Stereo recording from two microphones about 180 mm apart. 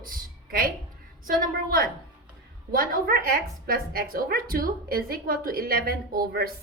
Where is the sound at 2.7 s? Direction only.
50° right (ahead or behind).